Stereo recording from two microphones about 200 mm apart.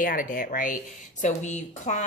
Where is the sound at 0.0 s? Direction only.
40° left (ahead or behind).